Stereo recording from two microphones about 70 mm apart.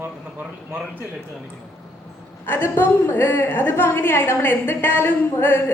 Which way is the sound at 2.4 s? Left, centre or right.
Left.